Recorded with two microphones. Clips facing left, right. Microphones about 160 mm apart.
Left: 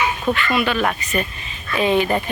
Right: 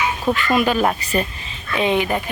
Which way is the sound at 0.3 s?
40° right (ahead or behind).